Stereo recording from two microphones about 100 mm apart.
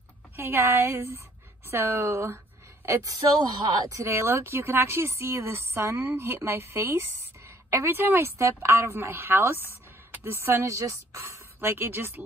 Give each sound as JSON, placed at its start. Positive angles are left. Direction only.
{"t": 0.4, "sound": "a woman's voice", "side_deg": -25}